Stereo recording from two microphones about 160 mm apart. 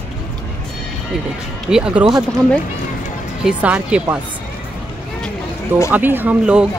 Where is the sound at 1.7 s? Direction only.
5° right (ahead or behind).